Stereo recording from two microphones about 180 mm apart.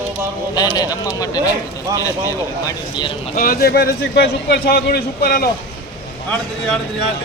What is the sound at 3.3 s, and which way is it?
A man's voice, 55° left (ahead or behind).